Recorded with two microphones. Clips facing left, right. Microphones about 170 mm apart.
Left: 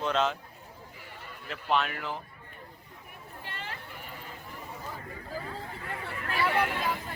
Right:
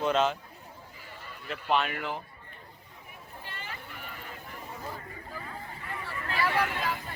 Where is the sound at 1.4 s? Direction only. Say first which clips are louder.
Right 1 dB; centre (ahead or behind).